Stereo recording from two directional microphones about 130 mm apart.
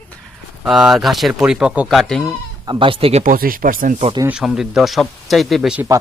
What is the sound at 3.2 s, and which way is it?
Speech, 90° right.